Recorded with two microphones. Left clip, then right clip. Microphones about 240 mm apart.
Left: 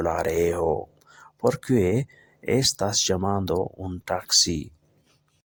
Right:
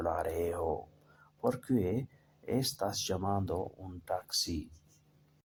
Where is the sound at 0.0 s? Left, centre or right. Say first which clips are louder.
Left 10 dB; left.